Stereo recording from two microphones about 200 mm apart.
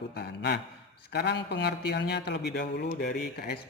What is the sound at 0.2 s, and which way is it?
A man's voice, 55° left (ahead or behind).